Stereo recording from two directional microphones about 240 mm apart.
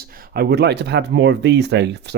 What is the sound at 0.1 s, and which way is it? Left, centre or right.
Speech, right.